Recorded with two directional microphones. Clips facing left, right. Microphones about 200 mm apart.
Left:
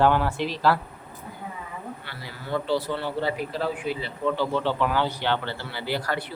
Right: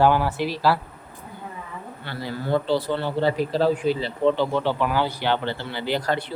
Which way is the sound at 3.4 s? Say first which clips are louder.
Right 7 dB; 35° right (ahead or behind).